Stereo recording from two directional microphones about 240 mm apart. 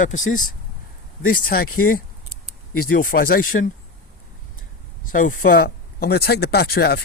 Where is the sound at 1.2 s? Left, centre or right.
Left.